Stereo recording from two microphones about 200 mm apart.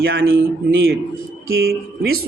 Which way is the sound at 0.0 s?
75° right (ahead or behind).